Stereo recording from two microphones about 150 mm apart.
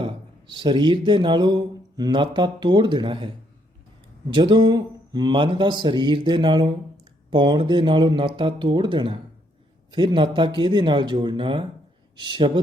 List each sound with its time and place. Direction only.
0.0 s speech: 30° right (ahead or behind)
4.4 s speech: 30° right (ahead or behind)